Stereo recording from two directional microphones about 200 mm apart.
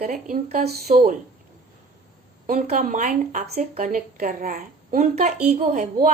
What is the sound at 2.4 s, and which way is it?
Speech, 40° right (ahead or behind).